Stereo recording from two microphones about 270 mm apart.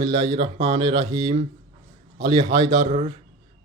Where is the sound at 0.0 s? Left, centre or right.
Centre.